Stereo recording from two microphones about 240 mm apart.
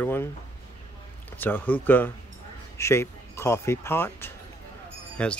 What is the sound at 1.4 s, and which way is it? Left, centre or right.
Speech, centre.